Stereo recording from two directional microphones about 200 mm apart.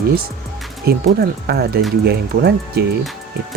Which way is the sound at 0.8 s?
50° right (ahead or behind).